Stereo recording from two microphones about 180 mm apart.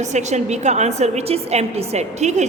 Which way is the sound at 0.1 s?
40° right (ahead or behind).